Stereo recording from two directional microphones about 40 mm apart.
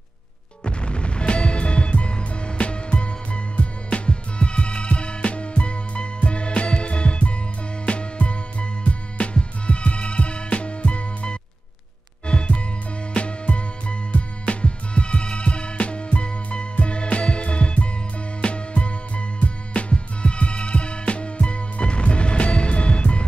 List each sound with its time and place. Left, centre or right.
0.7 s music: left